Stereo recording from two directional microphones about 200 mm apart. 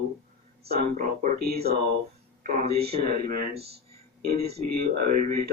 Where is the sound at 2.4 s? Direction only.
35° right (ahead or behind).